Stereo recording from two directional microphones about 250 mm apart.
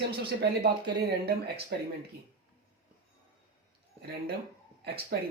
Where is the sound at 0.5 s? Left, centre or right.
Right.